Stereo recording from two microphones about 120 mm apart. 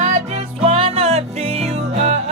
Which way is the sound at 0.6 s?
50° right (ahead or behind).